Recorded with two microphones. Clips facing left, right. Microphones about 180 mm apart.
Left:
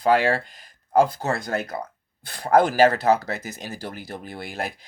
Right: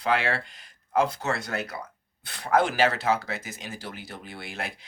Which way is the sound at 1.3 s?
50° left (ahead or behind).